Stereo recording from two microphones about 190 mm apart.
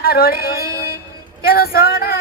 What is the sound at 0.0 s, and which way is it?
Speech, 50° left (ahead or behind).